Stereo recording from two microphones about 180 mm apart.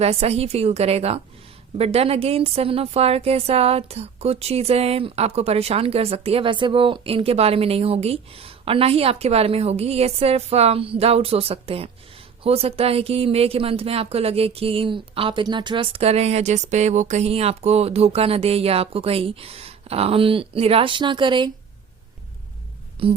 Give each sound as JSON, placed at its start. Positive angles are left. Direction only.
{"t": 0.0, "sound": "a woman's voice", "side_deg": -35}
{"t": 23.0, "sound": "speech", "side_deg": -30}